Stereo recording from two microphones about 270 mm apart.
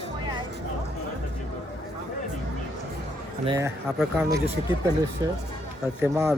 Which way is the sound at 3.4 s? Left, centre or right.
Centre.